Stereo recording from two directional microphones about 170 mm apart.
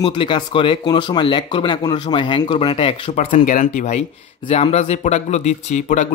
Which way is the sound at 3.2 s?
50° left (ahead or behind).